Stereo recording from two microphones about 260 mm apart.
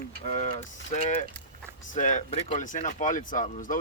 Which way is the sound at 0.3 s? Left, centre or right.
Left.